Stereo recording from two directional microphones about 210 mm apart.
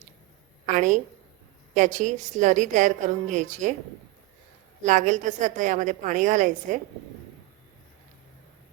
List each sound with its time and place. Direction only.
0.6 s a woman's voice: 35° right (ahead or behind)
4.8 s a woman's voice: 35° right (ahead or behind)